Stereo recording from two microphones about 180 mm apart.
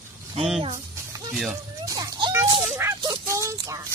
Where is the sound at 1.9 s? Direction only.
20° right (ahead or behind).